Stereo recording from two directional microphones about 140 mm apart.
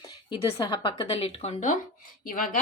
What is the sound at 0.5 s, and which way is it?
A woman's voice, 35° left (ahead or behind).